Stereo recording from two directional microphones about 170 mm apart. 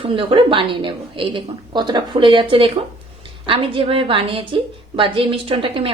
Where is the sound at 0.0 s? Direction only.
30° right (ahead or behind).